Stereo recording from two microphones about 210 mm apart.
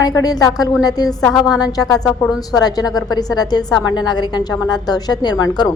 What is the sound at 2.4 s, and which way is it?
A woman's voice, 20° left (ahead or behind).